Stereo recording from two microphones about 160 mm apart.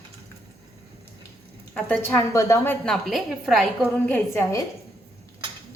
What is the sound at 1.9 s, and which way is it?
Speech, 15° left (ahead or behind).